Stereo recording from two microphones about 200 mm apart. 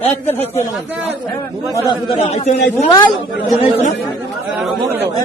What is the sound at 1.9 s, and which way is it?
Speech, 30° left (ahead or behind).